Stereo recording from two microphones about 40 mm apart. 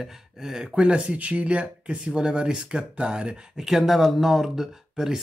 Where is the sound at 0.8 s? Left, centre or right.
Right.